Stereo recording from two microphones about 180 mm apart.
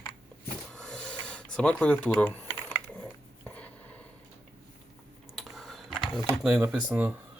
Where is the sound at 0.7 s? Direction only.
5° left (ahead or behind).